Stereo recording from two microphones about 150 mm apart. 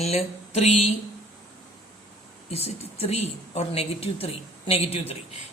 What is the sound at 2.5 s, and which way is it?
A man's voice, 45° left (ahead or behind).